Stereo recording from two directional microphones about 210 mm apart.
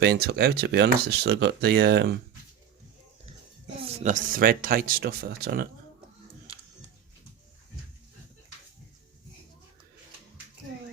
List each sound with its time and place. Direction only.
0.0 s speech: 50° right (ahead or behind)
3.8 s speech: 30° right (ahead or behind); by 5.6 s 45° right (ahead or behind)